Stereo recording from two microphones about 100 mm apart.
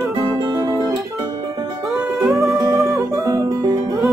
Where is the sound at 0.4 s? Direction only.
45° right (ahead or behind).